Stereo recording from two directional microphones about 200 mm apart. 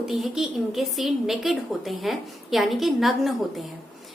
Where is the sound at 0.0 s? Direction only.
Centre (ahead or behind).